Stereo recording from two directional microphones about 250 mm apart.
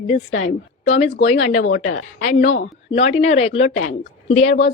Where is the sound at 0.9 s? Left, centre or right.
Left.